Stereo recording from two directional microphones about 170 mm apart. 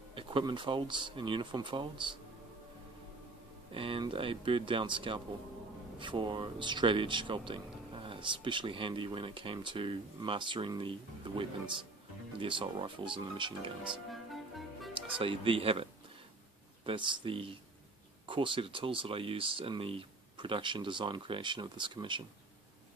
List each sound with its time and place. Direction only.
0.1 s speech: 30° right (ahead or behind)
3.7 s speech: 30° right (ahead or behind)
13.8 s music: centre (ahead or behind)
15.0 s speech: 30° right (ahead or behind)